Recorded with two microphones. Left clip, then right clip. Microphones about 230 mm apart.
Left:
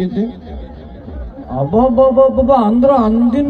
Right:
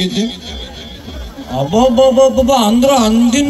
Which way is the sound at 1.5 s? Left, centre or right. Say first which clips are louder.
Right 1 dB; right.